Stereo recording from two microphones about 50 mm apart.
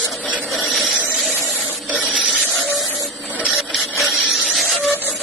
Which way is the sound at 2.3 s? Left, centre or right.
Centre.